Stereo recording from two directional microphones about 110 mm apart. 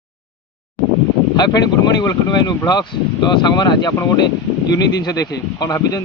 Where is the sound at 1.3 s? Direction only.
35° left (ahead or behind).